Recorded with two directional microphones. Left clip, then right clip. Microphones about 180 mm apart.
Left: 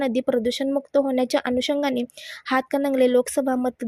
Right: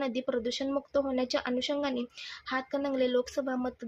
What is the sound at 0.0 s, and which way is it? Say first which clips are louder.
Speech: left 9 dB; 45° left (ahead or behind).